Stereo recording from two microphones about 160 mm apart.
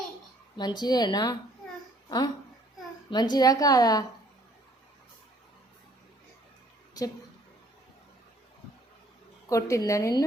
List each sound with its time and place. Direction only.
0.5 s a woman's voice: 25° left (ahead or behind)
9.5 s a woman's voice: 20° left (ahead or behind)